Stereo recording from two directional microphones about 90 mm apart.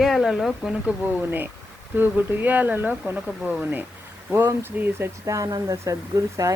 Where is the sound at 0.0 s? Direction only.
5° right (ahead or behind); by 5.0 s 25° right (ahead or behind).